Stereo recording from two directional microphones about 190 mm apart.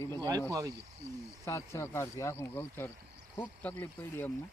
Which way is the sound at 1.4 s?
15° left (ahead or behind).